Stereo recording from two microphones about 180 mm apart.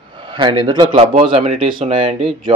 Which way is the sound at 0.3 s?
25° right (ahead or behind).